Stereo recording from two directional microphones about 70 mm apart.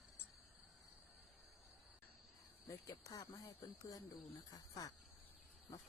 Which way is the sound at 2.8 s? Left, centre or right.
Left.